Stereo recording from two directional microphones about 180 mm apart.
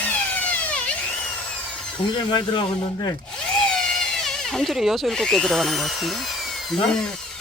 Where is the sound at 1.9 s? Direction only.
25° left (ahead or behind).